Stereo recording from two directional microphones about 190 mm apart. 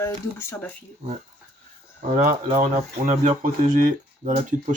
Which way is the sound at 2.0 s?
40° right (ahead or behind).